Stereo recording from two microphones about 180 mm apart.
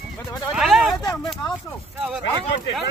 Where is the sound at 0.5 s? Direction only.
Centre (ahead or behind).